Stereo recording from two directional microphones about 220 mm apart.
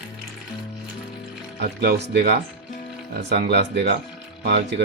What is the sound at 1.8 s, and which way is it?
Speech, 45° right (ahead or behind).